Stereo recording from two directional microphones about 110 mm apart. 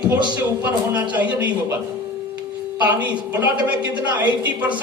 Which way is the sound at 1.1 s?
15° right (ahead or behind).